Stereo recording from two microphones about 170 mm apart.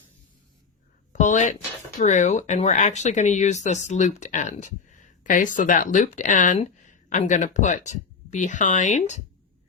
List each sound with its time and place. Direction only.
1.1 s speech: 45° left (ahead or behind)